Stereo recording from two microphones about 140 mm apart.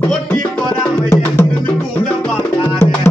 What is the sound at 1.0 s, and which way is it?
Music, 20° left (ahead or behind).